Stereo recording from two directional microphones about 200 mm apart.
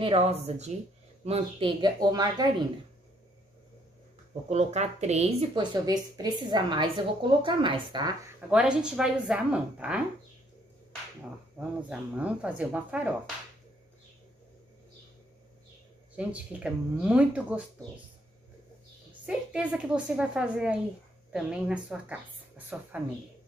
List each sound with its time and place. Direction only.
0.0 s a woman's voice: 30° right (ahead or behind)
4.5 s speech: 35° right (ahead or behind)
5.5 s a woman's voice: 20° right (ahead or behind)
8.5 s a woman's voice: 5° right (ahead or behind)
11.5 s speech: 5° right (ahead or behind)
16.2 s speech: 5° right (ahead or behind)
19.2 s a woman's voice: 5° right (ahead or behind)